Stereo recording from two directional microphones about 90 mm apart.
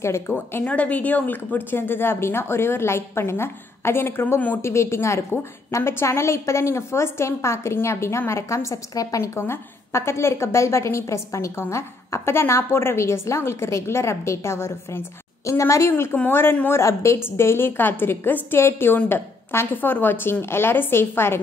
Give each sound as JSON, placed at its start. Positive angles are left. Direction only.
{"t": 0.7, "sound": "a woman's voice", "side_deg": 15}